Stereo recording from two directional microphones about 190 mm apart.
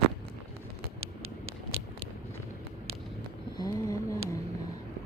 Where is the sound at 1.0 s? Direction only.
90° right.